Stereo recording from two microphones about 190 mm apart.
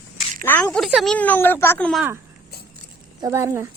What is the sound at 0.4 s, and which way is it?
Speech, 10° left (ahead or behind).